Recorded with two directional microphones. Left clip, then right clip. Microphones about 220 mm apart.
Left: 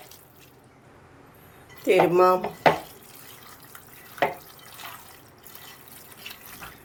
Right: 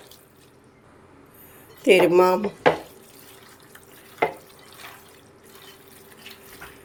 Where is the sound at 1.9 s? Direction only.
35° right (ahead or behind).